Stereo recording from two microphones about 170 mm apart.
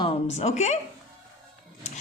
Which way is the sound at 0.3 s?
40° left (ahead or behind).